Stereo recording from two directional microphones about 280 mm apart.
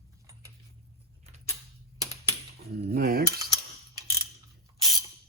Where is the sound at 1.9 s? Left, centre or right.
Centre.